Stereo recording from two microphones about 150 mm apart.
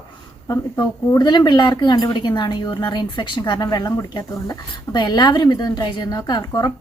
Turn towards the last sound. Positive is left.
turn(degrees=25)  # may be behind; listen again after turning